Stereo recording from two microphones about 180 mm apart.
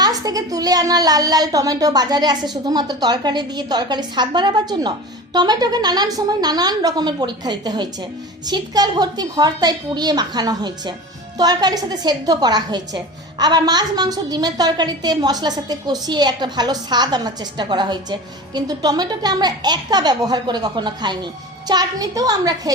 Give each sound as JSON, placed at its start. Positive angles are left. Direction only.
{"t": 0.0, "sound": "a woman's voice", "side_deg": -20}